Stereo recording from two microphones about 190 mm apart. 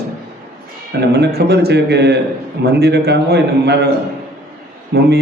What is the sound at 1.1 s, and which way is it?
A man's voice, 60° right (ahead or behind).